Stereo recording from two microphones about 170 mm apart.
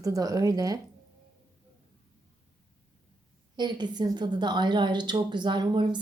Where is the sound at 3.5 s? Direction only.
25° right (ahead or behind).